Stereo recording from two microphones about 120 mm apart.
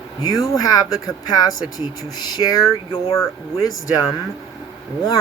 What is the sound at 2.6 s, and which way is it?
Speech, 30° left (ahead or behind).